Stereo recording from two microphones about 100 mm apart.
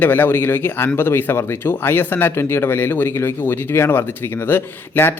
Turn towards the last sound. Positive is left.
turn(degrees=20)  # may be behind; listen again after turning